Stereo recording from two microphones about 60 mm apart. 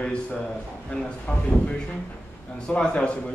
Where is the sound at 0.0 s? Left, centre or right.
Centre.